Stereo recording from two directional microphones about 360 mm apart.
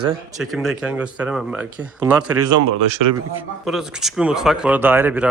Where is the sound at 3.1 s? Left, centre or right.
Centre.